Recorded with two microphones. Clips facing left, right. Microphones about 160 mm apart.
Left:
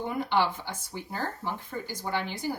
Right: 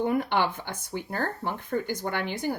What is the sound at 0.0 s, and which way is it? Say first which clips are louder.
Speech: right 2 dB; 55° right (ahead or behind).